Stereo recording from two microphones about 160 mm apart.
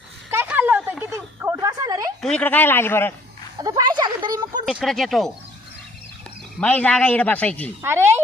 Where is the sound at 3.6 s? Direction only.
25° right (ahead or behind).